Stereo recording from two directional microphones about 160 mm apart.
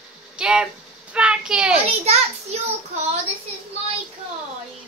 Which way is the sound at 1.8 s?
40° right (ahead or behind).